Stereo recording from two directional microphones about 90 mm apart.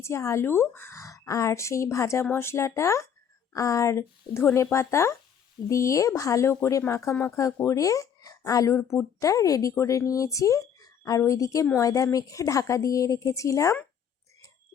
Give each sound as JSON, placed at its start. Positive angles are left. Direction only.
{"t": 0.0, "sound": "speech", "side_deg": 30}
{"t": 0.9, "sound": "speech", "side_deg": 35}